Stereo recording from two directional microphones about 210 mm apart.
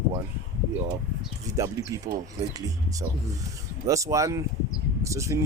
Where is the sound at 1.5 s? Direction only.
15° right (ahead or behind).